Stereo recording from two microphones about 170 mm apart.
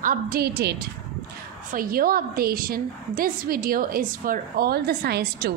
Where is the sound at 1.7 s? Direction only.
55° right (ahead or behind).